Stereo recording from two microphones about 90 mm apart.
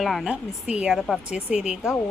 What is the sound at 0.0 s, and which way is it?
Speech, centre (ahead or behind).